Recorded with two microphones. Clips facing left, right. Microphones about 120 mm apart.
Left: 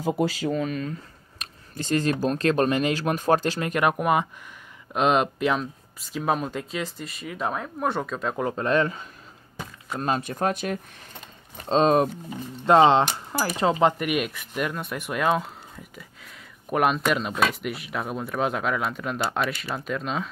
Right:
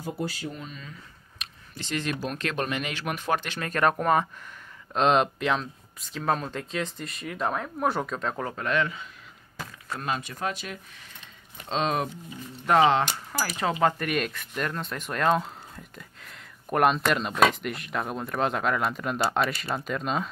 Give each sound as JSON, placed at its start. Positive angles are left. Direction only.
{"t": 0.0, "sound": "speech", "side_deg": 90}
{"t": 0.8, "sound": "speech", "side_deg": 45}
{"t": 3.6, "sound": "speech", "side_deg": 15}
{"t": 8.5, "sound": "speech", "side_deg": 30}
{"t": 11.5, "sound": "speech", "side_deg": 40}
{"t": 12.6, "sound": "speech", "side_deg": 25}
{"t": 13.9, "sound": "speech", "side_deg": 10}